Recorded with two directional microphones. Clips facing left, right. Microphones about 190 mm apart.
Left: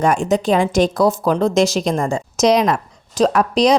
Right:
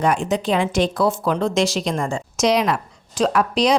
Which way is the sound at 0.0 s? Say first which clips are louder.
Left 3 dB; 45° left (ahead or behind).